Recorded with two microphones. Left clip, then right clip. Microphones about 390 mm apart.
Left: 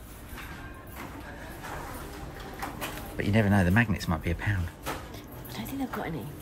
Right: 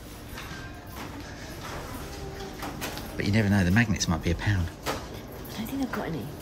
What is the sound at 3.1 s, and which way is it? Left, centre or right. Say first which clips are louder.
Speech: left 1 dB; centre.